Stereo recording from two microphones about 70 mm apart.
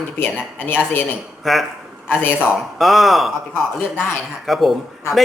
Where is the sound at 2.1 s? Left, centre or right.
Left.